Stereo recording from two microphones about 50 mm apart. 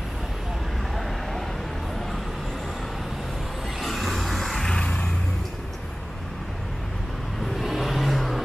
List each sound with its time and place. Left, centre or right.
3.8 s vehicle: centre
4.7 s vehicle: left
7.5 s vehicle: centre